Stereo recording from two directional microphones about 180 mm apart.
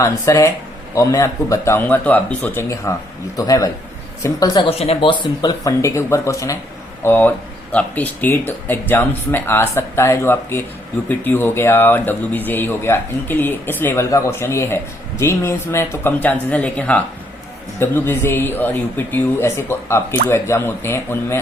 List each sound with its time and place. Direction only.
0.0 s a woman's voice: 15° left (ahead or behind)
4.8 s speech: 30° left (ahead or behind); by 21.4 s 15° left (ahead or behind)